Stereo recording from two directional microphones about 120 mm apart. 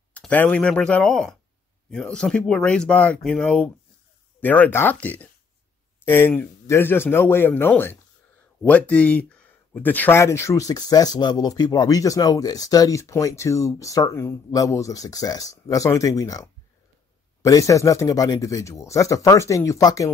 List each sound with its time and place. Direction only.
0.1 s speech: 10° left (ahead or behind); by 20.1 s 30° left (ahead or behind)